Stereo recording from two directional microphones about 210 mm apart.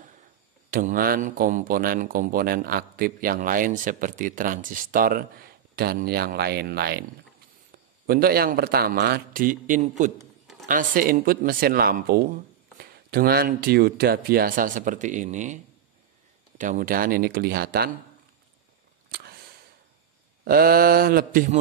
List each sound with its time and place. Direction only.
0.7 s speech: 40° right (ahead or behind)
19.0 s a sound: 50° right (ahead or behind)
20.4 s speech: 45° right (ahead or behind)